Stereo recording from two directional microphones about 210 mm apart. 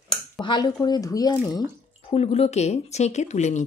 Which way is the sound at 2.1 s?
30° left (ahead or behind).